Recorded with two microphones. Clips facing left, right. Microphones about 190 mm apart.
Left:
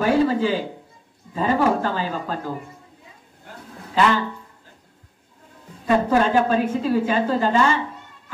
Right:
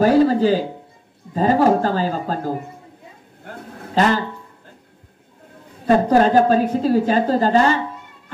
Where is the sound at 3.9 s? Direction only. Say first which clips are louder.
Right 2 dB; 40° right (ahead or behind).